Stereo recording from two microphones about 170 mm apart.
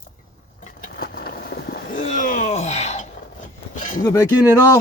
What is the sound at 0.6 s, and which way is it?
Vehicle, 60° left (ahead or behind).